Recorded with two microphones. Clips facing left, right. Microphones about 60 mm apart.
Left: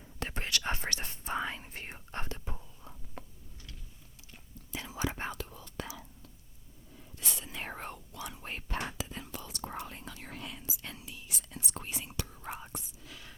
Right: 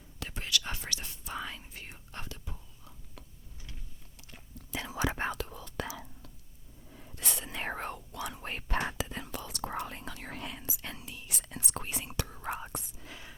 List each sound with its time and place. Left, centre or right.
0.2 s whispering: left
4.2 s whispering: right
6.9 s whispering: right
8.8 s whispering: right
9.0 s whispering: right
13.0 s whispering: right